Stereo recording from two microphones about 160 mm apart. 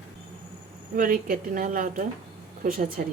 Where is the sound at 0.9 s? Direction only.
60° right (ahead or behind).